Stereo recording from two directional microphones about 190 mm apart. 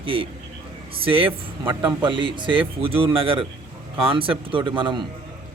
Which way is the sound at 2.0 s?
25° right (ahead or behind).